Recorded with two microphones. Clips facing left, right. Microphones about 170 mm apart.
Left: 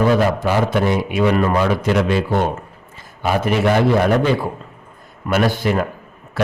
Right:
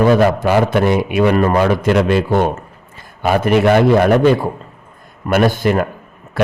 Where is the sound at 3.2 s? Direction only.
55° right (ahead or behind).